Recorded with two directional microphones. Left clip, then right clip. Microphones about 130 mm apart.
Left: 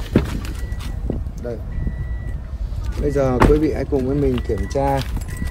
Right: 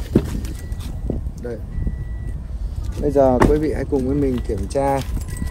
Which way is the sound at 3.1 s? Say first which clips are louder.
Right 4 dB; 65° left (ahead or behind).